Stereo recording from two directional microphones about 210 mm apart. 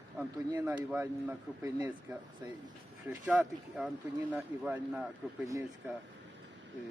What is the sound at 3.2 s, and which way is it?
Speech, 5° right (ahead or behind).